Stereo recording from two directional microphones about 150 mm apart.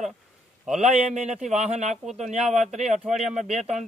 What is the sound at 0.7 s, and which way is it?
Speech, 50° right (ahead or behind).